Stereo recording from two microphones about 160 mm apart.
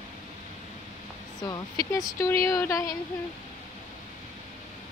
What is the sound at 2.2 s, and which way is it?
Speech, 20° left (ahead or behind).